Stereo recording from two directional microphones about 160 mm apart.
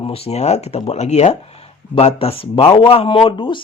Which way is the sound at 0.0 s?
35° left (ahead or behind).